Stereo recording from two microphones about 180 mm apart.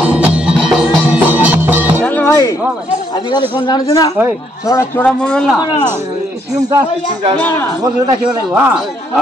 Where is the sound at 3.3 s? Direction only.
25° left (ahead or behind).